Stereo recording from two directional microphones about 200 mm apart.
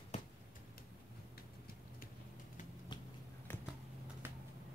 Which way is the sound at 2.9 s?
20° left (ahead or behind).